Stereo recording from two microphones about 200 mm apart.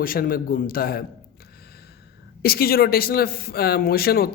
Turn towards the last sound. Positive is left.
turn(degrees=50)  # may be behind; listen again after turning